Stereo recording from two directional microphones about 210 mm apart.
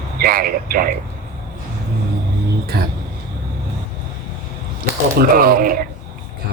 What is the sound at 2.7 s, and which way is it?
Speech, 45° right (ahead or behind).